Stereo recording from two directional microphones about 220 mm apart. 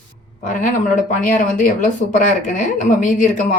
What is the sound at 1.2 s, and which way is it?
A woman's voice, 35° left (ahead or behind).